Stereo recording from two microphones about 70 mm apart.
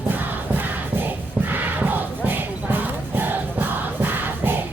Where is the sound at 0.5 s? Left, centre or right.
Right.